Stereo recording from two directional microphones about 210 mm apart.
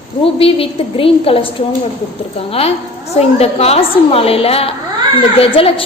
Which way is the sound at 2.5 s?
30° left (ahead or behind).